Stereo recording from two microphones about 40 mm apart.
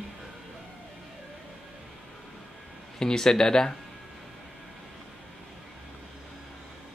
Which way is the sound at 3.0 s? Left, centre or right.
Centre.